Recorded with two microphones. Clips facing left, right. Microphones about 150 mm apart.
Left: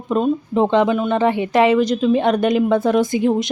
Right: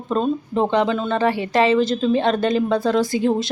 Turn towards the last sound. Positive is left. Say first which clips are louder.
# left 2 dB
turn(degrees=15)  # may be behind; listen again after turning